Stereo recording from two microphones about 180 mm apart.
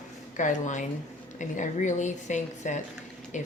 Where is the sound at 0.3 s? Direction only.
45° left (ahead or behind).